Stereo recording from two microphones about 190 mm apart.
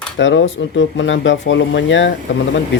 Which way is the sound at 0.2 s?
75° left (ahead or behind).